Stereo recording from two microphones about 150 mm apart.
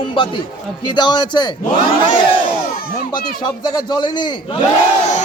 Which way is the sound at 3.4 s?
30° left (ahead or behind).